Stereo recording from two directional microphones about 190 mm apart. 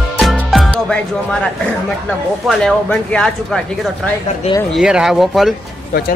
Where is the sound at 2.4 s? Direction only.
Centre (ahead or behind).